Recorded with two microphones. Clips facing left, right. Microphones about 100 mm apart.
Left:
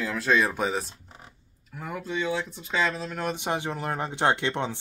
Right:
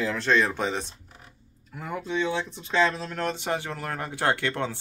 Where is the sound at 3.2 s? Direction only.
20° left (ahead or behind).